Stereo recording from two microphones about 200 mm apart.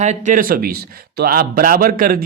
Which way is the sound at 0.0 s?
35° right (ahead or behind).